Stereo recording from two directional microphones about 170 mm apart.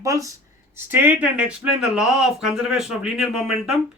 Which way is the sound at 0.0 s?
20° right (ahead or behind).